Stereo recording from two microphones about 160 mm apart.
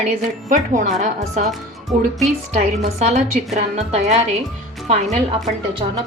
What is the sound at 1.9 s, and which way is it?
Speech, centre (ahead or behind).